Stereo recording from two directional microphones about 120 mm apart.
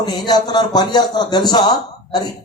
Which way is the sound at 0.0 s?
35° left (ahead or behind).